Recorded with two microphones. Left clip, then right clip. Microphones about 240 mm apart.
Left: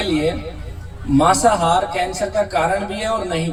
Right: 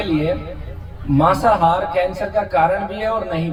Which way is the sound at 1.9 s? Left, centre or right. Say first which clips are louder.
Right 1 dB; left.